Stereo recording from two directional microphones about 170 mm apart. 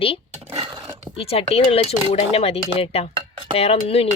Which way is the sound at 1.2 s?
35° left (ahead or behind).